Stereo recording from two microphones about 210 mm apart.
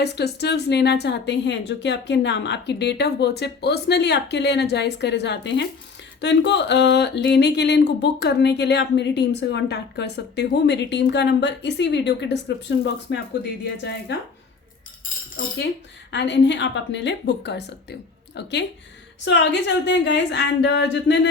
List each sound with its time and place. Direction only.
0.0 s a woman's voice: 50° left (ahead or behind)
16.1 s a woman's voice: 55° left (ahead or behind)